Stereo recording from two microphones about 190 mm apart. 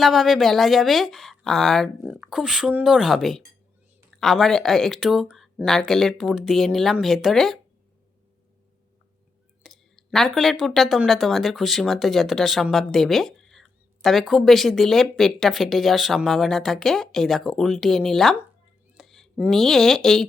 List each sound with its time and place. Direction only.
0.0 s speech: centre (ahead or behind)
9.6 s speech: centre (ahead or behind)